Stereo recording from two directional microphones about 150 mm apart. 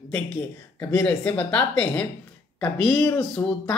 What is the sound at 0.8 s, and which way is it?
Speech, 10° left (ahead or behind).